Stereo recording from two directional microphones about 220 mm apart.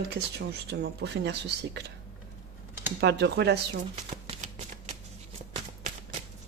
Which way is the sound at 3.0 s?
50° right (ahead or behind).